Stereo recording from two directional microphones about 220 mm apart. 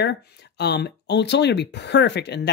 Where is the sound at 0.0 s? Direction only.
50° left (ahead or behind).